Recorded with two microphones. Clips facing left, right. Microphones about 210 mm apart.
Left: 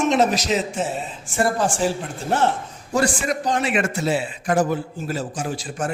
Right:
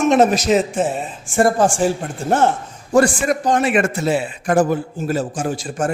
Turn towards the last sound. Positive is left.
turn(degrees=-45)  # may be behind; listen again after turning